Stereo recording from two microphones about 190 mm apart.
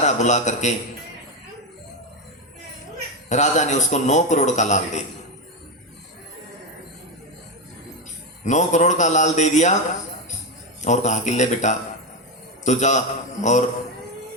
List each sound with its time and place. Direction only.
0.0 s a man's voice: 40° left (ahead or behind)
3.2 s a man's voice: 40° left (ahead or behind)
8.4 s a man's voice: 40° left (ahead or behind)
10.8 s a man's voice: 40° left (ahead or behind)